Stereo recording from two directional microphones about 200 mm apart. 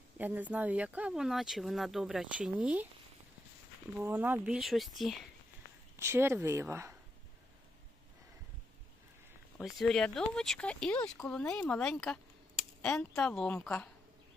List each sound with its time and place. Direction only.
0.2 s speech: 10° right (ahead or behind)
3.9 s speech: 10° right (ahead or behind)
6.0 s speech: 10° right (ahead or behind)
9.6 s speech: centre (ahead or behind)